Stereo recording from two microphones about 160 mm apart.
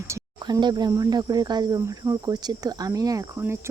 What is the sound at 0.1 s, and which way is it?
Speech, 25° right (ahead or behind).